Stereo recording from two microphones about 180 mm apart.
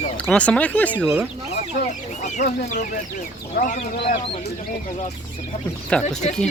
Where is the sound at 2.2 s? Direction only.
40° left (ahead or behind).